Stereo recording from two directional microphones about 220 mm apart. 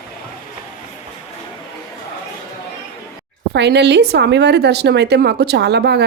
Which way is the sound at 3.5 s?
50° right (ahead or behind).